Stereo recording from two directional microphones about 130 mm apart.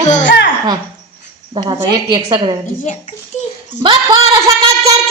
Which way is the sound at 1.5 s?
35° right (ahead or behind).